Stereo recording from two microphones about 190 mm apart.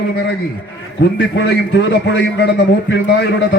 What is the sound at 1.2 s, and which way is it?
A man's voice, 65° left (ahead or behind).